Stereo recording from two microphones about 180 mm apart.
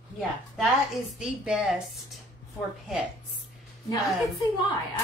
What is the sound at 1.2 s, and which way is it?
Speech, 5° right (ahead or behind).